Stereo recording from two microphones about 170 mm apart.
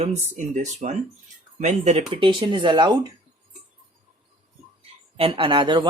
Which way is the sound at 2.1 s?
30° right (ahead or behind).